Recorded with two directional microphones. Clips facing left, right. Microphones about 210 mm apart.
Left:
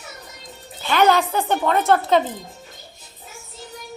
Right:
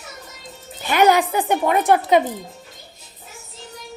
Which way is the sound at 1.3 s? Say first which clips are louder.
Right 1 dB; 15° right (ahead or behind).